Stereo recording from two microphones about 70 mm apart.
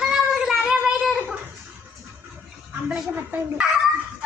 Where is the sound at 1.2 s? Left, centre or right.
Centre.